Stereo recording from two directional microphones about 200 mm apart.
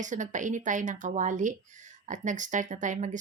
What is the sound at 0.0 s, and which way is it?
Speech, 40° right (ahead or behind).